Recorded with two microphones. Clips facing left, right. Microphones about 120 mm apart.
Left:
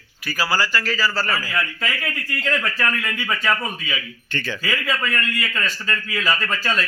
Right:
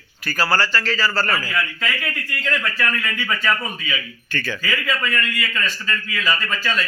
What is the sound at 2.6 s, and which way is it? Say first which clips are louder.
A man's voice: even; 30° left (ahead or behind).